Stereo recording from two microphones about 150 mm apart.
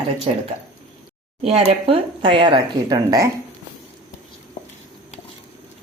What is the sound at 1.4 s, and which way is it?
Speech, 40° right (ahead or behind).